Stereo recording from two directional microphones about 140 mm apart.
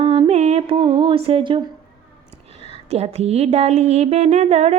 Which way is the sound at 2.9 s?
50° right (ahead or behind).